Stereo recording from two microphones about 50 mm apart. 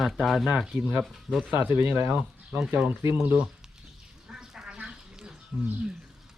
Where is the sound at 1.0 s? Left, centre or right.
Centre.